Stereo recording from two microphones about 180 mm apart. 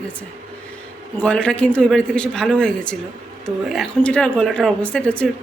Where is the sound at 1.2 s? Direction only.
5° left (ahead or behind).